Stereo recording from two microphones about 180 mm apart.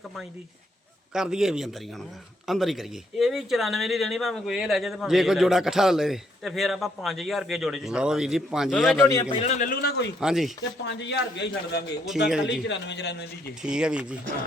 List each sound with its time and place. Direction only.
1.1 s speech: 5° right (ahead or behind)
9.0 s a man's voice: 15° left (ahead or behind)
9.3 s a man's voice: 35° left (ahead or behind)
10.2 s speech: centre (ahead or behind)
10.6 s speech: 75° left (ahead or behind)
13.6 s speech: 5° right (ahead or behind)